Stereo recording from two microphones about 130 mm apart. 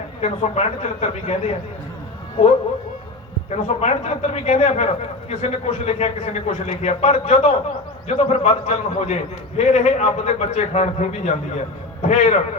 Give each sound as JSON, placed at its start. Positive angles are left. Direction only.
{"t": 0.2, "sound": "a man's voice", "side_deg": 55}
{"t": 3.5, "sound": "a man's voice", "side_deg": 55}